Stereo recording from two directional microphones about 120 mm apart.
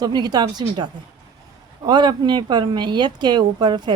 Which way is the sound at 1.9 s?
40° right (ahead or behind).